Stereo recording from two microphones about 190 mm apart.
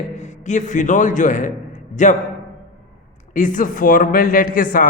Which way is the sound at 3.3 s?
40° left (ahead or behind).